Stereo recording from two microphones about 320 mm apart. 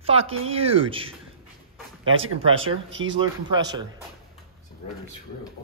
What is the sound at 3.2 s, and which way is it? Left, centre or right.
Speech, centre.